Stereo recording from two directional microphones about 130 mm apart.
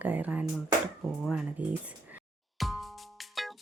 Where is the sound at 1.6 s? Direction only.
10° right (ahead or behind).